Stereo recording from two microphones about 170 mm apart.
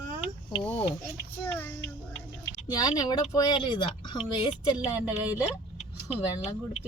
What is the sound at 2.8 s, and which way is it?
Speech, 25° left (ahead or behind).